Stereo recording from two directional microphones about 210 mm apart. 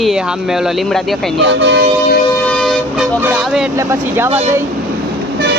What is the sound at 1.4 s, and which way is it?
Speech, 60° right (ahead or behind).